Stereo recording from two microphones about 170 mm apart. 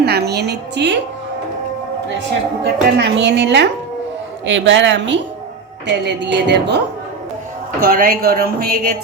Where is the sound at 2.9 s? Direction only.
90° right.